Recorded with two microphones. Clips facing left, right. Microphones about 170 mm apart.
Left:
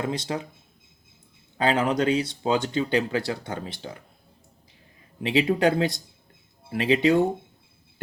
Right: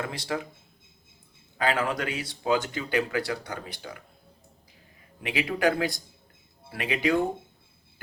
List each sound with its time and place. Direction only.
0.0 s speech: 20° left (ahead or behind)
1.5 s speech: 25° left (ahead or behind)
5.2 s speech: 25° left (ahead or behind)